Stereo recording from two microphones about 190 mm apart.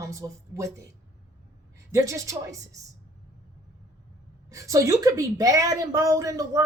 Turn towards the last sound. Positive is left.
turn(degrees=-15)  # may be behind; listen again after turning